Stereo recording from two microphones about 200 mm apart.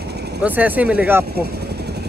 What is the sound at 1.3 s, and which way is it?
Vehicle, 55° right (ahead or behind).